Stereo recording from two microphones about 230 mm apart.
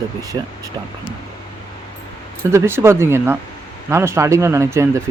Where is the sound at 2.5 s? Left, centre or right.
Centre.